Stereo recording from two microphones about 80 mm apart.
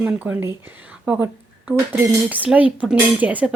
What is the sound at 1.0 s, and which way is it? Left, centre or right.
Speech, centre.